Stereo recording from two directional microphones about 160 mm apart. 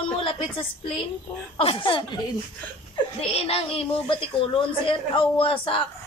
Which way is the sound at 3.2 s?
40° left (ahead or behind).